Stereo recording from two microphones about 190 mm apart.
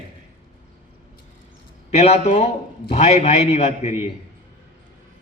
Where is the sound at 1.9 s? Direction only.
35° left (ahead or behind).